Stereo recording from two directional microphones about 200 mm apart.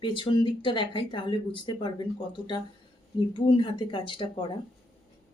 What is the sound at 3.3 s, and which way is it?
Speech, 25° left (ahead or behind).